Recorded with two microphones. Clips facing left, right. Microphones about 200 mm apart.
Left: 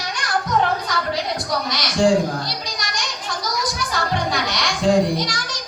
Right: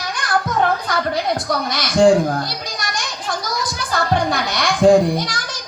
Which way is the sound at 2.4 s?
55° right (ahead or behind).